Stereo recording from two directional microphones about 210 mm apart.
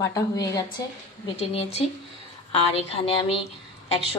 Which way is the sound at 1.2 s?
30° left (ahead or behind).